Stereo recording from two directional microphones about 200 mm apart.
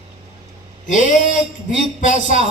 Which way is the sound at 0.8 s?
40° left (ahead or behind).